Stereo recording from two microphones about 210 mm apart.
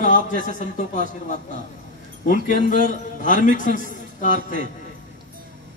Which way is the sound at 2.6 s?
40° left (ahead or behind).